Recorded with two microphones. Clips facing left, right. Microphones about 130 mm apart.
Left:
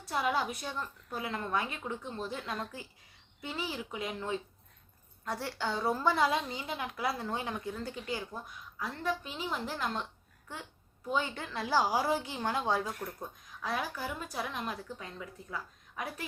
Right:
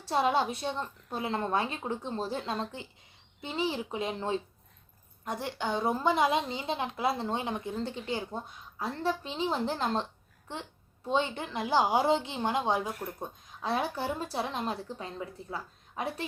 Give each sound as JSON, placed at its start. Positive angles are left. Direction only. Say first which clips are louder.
{"t": 0.0, "sound": "a woman's voice", "louder": "right 5 dB", "side_deg": -30}
{"t": 5.2, "sound": "a woman's voice", "louder": "right 2 dB", "side_deg": -20}
{"t": 12.9, "sound": "speech", "louder": "right 2 dB", "side_deg": -5}
{"t": 13.1, "sound": "a woman's voice", "louder": "right 3 dB", "side_deg": -25}